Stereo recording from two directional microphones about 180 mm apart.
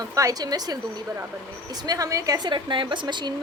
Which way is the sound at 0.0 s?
20° right (ahead or behind).